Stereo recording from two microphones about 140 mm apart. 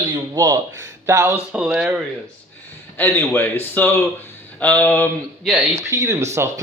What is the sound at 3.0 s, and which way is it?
Speech, 15° left (ahead or behind).